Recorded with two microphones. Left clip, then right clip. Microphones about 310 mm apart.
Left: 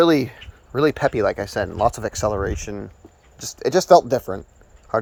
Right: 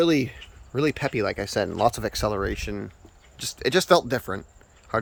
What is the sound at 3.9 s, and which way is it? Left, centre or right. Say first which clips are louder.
Speech: left 8 dB; centre.